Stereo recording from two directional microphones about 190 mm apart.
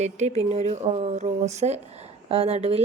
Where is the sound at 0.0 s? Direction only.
35° right (ahead or behind).